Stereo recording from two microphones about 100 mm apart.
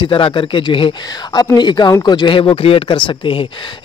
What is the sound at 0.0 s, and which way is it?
Speech, 55° left (ahead or behind).